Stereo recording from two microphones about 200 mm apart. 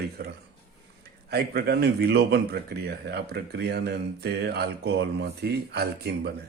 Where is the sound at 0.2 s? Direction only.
50° right (ahead or behind).